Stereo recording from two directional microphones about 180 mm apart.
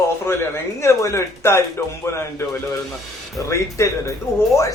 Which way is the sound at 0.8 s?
15° left (ahead or behind).